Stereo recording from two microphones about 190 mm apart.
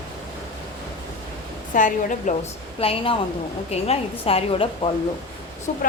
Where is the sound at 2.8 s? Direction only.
30° left (ahead or behind).